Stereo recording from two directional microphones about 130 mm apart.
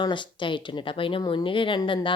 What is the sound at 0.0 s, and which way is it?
A woman's voice, 35° left (ahead or behind).